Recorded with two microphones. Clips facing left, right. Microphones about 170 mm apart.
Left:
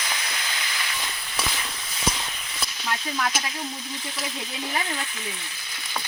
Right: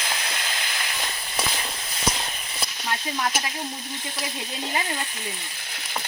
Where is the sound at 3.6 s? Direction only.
45° right (ahead or behind).